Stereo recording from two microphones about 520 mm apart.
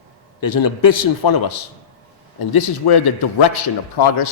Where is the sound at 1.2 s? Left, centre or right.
Left.